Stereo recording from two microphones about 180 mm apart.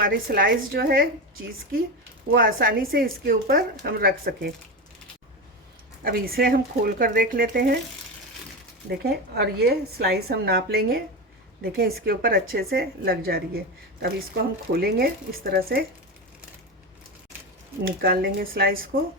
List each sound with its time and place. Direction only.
0.0 s a woman's voice: 55° right (ahead or behind)
2.3 s a woman's voice: 55° right (ahead or behind)
6.0 s speech: 55° right (ahead or behind)
9.0 s a woman's voice: 60° right (ahead or behind)
17.8 s a woman's voice: 55° right (ahead or behind)